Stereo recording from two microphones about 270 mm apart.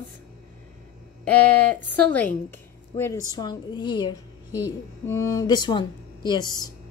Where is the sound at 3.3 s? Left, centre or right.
Centre.